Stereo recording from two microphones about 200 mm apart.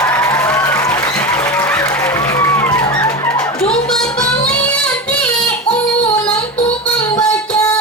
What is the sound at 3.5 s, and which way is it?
Music, 5° left (ahead or behind).